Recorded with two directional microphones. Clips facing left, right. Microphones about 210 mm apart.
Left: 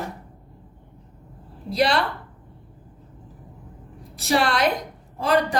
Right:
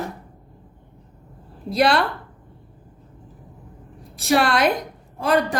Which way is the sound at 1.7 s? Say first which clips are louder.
Right 3 dB; 50° right (ahead or behind).